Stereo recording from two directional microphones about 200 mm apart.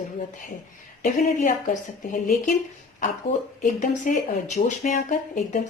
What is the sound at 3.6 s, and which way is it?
Speech, 40° left (ahead or behind).